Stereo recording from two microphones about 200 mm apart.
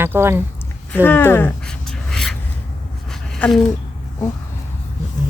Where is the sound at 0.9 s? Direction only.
10° left (ahead or behind).